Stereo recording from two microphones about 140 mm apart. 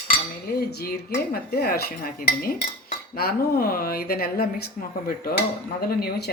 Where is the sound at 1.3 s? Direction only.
90° left.